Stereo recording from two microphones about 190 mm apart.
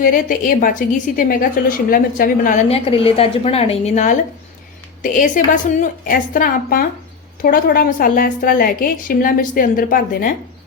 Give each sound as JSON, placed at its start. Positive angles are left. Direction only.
{"t": 0.0, "sound": "a woman's voice", "side_deg": 45}
{"t": 2.6, "sound": "a woman's voice", "side_deg": 30}